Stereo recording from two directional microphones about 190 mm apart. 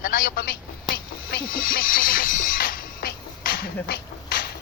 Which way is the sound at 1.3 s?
50° left (ahead or behind).